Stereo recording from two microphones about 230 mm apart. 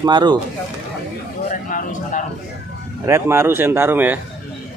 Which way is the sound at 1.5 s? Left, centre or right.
Left.